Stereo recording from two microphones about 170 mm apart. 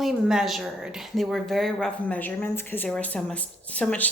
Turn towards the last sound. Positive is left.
turn(degrees=10)  # may be behind; listen again after turning